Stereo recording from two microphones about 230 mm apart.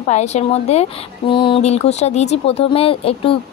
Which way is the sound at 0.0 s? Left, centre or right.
Left.